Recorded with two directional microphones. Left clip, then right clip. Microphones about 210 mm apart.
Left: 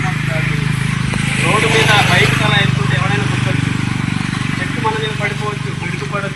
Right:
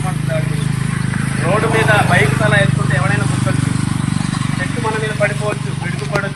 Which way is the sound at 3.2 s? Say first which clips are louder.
Left 1 dB; 65° right (ahead or behind).